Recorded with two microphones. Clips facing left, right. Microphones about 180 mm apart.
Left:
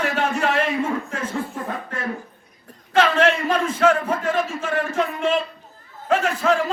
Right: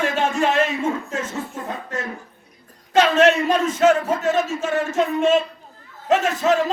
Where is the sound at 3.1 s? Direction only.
25° right (ahead or behind).